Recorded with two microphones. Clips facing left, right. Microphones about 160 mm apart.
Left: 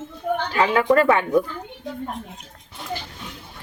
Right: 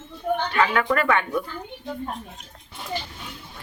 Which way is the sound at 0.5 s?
30° left (ahead or behind).